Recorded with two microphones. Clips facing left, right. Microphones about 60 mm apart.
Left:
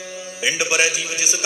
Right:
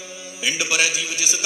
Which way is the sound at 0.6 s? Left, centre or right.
Left.